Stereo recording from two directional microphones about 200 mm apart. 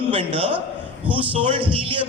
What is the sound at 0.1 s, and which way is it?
Speech, 25° right (ahead or behind).